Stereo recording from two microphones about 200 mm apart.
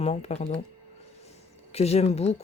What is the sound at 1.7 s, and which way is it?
Speech, 30° left (ahead or behind).